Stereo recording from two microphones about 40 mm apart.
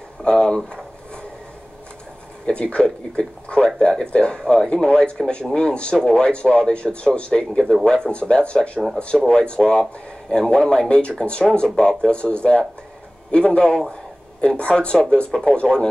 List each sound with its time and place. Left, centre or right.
0.2 s speech: left
2.4 s a man's voice: left
10.9 s a man's voice: left